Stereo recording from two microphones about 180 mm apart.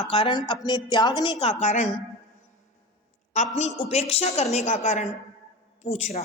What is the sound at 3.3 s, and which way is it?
A man's voice, 40° left (ahead or behind).